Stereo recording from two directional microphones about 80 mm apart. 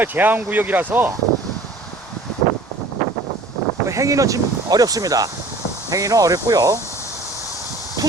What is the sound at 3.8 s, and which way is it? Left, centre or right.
Speech, right.